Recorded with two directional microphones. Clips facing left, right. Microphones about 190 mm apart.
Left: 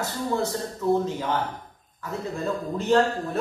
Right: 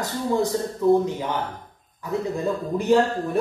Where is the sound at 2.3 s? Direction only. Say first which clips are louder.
Right 3 dB; 10° right (ahead or behind).